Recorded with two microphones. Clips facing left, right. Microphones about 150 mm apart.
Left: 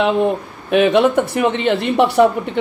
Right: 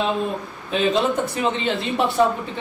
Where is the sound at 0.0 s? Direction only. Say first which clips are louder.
Left 7 dB; 65° left (ahead or behind).